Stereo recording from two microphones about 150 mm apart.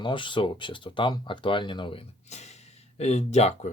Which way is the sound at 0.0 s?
30° left (ahead or behind).